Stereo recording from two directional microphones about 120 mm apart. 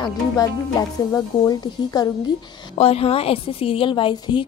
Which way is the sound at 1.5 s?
30° left (ahead or behind).